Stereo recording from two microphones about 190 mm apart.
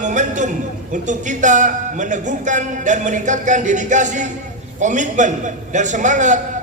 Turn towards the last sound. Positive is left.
turn(degrees=-40)  # may be behind; listen again after turning